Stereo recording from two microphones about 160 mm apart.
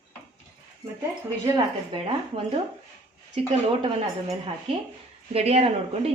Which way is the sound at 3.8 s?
35° right (ahead or behind).